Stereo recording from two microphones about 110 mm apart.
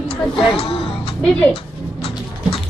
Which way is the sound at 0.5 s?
60° left (ahead or behind).